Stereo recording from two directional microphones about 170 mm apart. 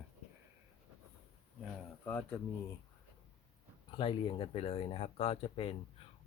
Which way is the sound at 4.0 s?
30° left (ahead or behind).